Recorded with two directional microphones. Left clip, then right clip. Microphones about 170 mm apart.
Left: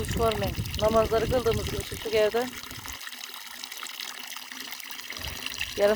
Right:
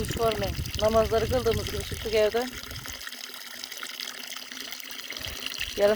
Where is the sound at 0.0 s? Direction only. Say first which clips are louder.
Even; 15° left (ahead or behind).